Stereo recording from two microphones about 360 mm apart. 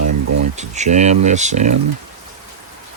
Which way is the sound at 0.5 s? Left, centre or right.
Centre.